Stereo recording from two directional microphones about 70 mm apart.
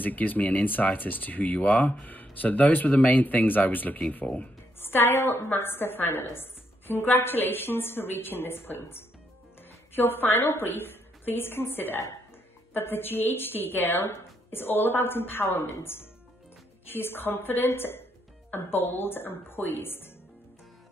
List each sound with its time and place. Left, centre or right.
0.0 s speech: left
4.7 s music: left
5.1 s a woman's voice: left
10.3 s a woman's voice: left
10.6 s a woman's voice: left